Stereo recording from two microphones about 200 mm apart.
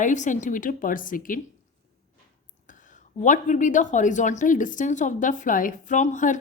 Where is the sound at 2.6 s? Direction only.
40° left (ahead or behind).